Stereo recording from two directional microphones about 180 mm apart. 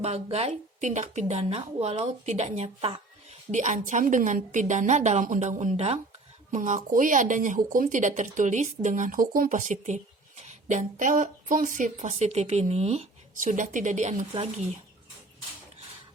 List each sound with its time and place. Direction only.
0.0 s a woman's voice: 35° right (ahead or behind)